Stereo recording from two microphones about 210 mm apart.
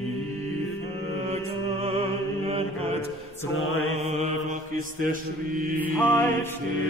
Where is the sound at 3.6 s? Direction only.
75° left (ahead or behind).